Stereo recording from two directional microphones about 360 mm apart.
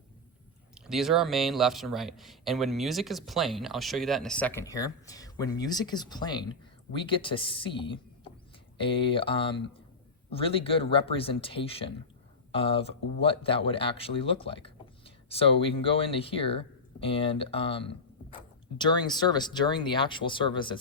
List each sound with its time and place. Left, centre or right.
0.7 s a man's voice: centre